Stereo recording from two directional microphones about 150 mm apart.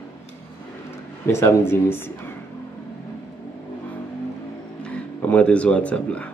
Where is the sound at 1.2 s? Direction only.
15° left (ahead or behind).